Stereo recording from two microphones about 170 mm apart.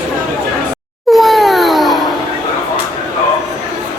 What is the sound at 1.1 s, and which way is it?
Wail, centre (ahead or behind).